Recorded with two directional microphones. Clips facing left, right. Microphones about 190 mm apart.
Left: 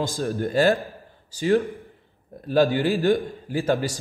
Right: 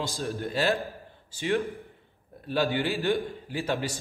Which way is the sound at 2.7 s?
40° left (ahead or behind).